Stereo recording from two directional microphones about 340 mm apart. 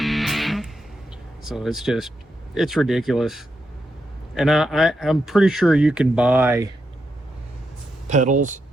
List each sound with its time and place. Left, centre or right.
0.0 s music: centre
1.5 s speech: centre
8.0 s speech: right